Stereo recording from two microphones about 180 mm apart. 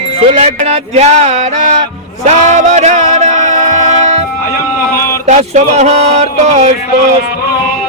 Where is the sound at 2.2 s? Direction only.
40° right (ahead or behind).